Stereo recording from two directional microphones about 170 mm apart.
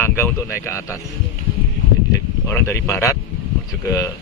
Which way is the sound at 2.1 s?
15° left (ahead or behind).